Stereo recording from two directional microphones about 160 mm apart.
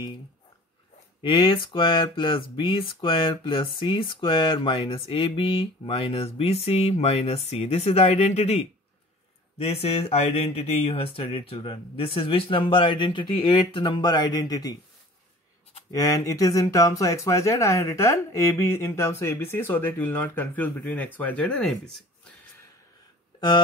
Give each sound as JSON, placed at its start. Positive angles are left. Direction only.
{"t": 1.2, "sound": "speech", "side_deg": 30}
{"t": 15.9, "sound": "speech", "side_deg": 20}